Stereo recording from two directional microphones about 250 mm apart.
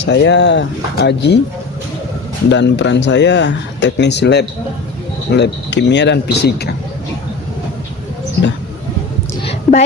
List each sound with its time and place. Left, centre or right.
0.0 s speech: left
2.5 s speech: left
9.4 s a sound: left